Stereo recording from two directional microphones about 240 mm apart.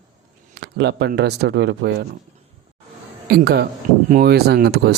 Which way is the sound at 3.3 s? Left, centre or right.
Right.